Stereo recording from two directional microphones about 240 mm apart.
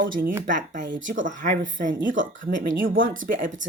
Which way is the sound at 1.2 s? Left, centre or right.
Right.